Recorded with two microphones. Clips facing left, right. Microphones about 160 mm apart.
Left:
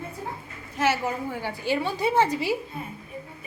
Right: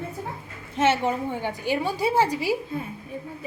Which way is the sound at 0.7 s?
25° right (ahead or behind).